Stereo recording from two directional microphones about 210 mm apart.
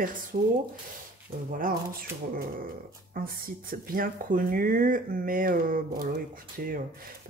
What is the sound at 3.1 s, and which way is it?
Speech, 45° right (ahead or behind).